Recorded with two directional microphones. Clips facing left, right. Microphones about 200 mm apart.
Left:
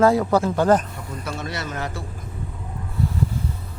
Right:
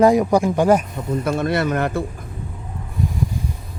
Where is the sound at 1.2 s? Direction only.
55° right (ahead or behind).